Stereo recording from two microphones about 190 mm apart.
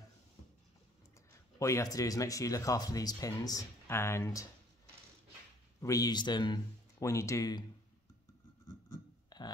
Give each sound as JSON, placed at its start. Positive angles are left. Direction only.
{"t": 1.6, "sound": "speech", "side_deg": 15}
{"t": 5.8, "sound": "speech", "side_deg": 15}
{"t": 8.6, "sound": "a sound", "side_deg": 20}